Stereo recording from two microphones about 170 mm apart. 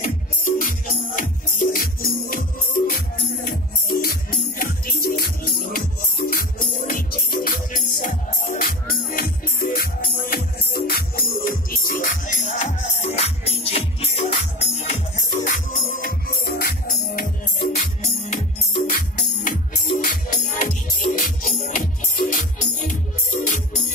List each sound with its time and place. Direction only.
0.0 s music: 55° left (ahead or behind)
15.4 s music: 50° left (ahead or behind)